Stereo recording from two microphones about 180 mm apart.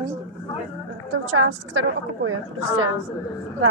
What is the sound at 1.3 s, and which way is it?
A woman's voice, 90° right.